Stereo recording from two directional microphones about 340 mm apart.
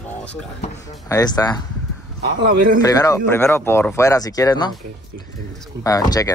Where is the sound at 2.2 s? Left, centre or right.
Right.